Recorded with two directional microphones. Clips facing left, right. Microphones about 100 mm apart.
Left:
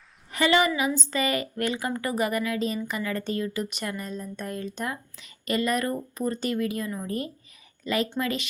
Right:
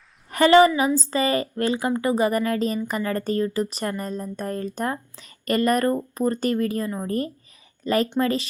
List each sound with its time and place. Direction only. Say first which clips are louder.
0.3 s a woman's voice: right 8 dB; 45° right (ahead or behind)